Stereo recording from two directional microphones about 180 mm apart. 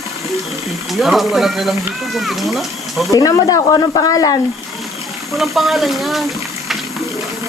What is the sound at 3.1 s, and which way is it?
Speech, 20° left (ahead or behind).